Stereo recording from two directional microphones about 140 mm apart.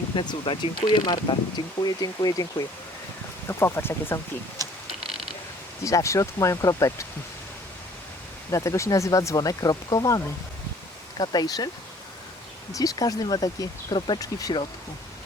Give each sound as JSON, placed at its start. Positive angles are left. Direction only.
{"t": 0.2, "sound": "speech", "side_deg": 35}
{"t": 3.6, "sound": "speech", "side_deg": 15}
{"t": 5.0, "sound": "mechanisms", "side_deg": 0}
{"t": 5.8, "sound": "speech", "side_deg": 20}
{"t": 8.4, "sound": "speech", "side_deg": 20}
{"t": 11.2, "sound": "speech", "side_deg": 30}
{"t": 12.7, "sound": "speech", "side_deg": 25}